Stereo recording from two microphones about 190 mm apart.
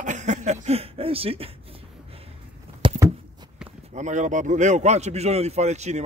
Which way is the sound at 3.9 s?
40° right (ahead or behind).